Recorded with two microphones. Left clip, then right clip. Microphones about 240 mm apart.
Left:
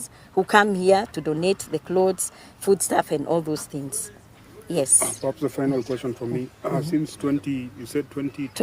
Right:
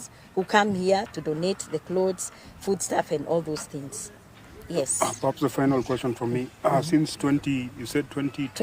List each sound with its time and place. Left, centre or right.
0.3 s speech: left
4.9 s speech: right